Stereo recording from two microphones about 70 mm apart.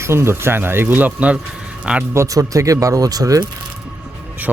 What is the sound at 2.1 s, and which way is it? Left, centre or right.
Speech, right.